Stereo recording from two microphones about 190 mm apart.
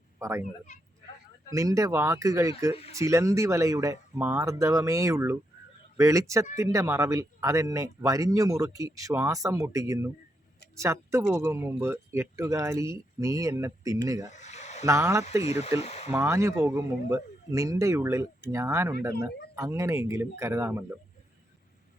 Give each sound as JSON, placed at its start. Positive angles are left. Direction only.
{"t": 0.2, "sound": "speech", "side_deg": -15}
{"t": 1.5, "sound": "speech", "side_deg": -15}
{"t": 14.3, "sound": "a sound", "side_deg": 40}
{"t": 14.8, "sound": "speech", "side_deg": -15}
{"t": 15.4, "sound": "speech", "side_deg": 35}
{"t": 16.0, "sound": "speech", "side_deg": -10}